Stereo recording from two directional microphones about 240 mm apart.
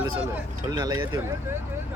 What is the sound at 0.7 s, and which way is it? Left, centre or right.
Speech, centre.